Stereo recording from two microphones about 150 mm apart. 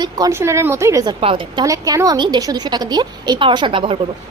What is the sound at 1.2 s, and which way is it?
Speech, 35° right (ahead or behind).